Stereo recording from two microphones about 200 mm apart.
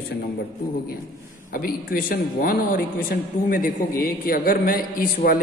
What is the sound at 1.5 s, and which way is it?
Speech, 45° left (ahead or behind).